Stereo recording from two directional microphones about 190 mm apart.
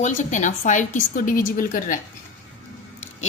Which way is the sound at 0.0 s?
40° left (ahead or behind).